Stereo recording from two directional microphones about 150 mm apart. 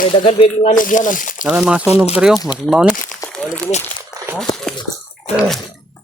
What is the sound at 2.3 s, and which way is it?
Speech, 25° left (ahead or behind).